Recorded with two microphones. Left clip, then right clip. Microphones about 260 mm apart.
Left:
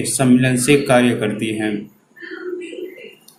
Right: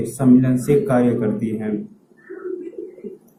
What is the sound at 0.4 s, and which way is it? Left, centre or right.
Speech, left.